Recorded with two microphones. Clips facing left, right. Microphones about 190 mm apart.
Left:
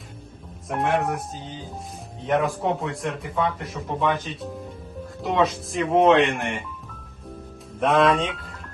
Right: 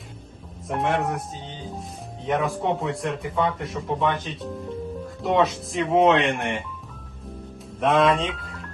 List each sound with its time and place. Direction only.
0.7 s a man's voice: centre (ahead or behind)
7.8 s speech: centre (ahead or behind)